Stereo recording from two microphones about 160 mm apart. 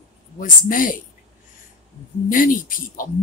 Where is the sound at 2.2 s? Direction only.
55° left (ahead or behind).